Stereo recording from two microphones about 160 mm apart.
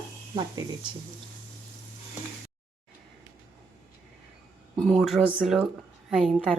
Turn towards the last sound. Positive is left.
turn(degrees=0)  # may be behind; listen again after turning